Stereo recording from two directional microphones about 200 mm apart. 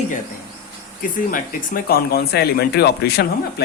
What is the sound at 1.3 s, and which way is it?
Speech, 45° left (ahead or behind).